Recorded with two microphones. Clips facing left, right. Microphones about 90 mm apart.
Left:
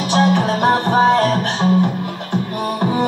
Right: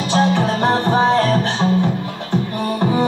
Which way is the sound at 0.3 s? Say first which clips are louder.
Left 2 dB; 15° left (ahead or behind).